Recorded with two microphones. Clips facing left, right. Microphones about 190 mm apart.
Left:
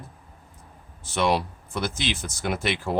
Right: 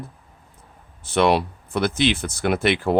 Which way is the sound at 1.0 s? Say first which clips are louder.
Right 5 dB; 60° right (ahead or behind).